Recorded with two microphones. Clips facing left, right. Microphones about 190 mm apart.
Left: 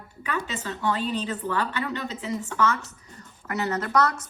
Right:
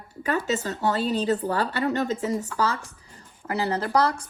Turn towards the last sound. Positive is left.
turn(degrees=-30)  # may be behind; listen again after turning